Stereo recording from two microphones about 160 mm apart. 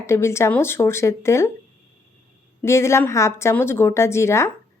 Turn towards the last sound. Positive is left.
turn(degrees=15)  # may be behind; listen again after turning